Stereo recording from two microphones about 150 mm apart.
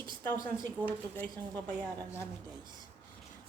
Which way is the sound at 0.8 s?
10° right (ahead or behind).